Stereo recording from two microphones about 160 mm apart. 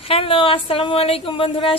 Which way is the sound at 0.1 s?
35° left (ahead or behind).